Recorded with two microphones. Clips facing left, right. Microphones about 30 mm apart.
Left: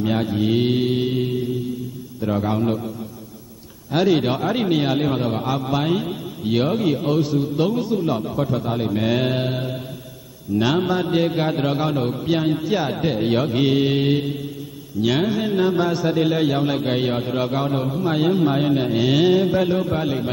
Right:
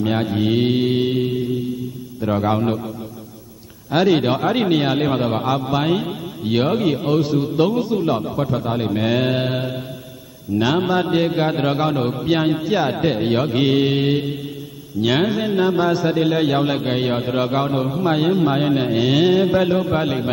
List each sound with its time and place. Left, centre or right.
0.0 s a man's voice: centre
3.9 s a man's voice: centre